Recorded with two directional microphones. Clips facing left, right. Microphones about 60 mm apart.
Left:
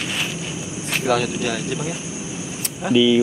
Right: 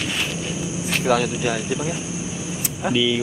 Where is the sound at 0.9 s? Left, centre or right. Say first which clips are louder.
Even; centre.